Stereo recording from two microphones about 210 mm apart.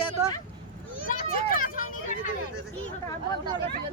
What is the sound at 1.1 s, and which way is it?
Vehicle, 40° left (ahead or behind).